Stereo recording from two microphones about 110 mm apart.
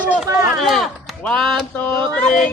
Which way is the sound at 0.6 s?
Centre (ahead or behind).